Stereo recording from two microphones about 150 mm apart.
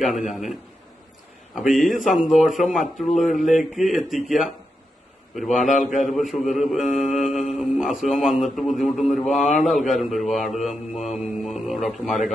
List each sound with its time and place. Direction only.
0.0 s a man's voice: centre (ahead or behind)
5.7 s a man's voice: 60° left (ahead or behind)
6.0 s a man's voice: centre (ahead or behind)